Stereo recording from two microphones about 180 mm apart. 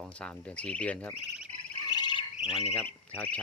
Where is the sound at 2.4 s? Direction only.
Centre (ahead or behind).